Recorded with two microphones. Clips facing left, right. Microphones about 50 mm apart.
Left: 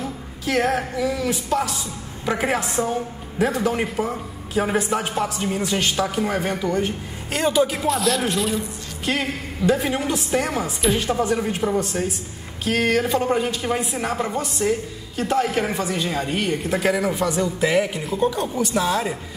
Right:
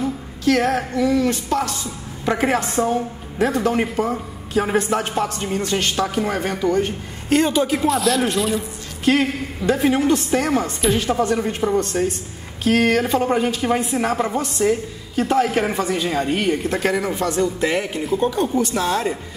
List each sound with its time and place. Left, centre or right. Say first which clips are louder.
0.0 s music: right 7 dB; centre
18.5 s a woman's voice: right 3 dB; centre
18.8 s music: left 2 dB; centre